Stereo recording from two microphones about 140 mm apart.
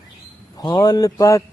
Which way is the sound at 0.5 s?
30° left (ahead or behind).